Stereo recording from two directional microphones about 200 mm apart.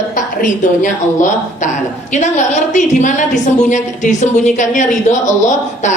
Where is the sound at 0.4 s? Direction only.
40° left (ahead or behind).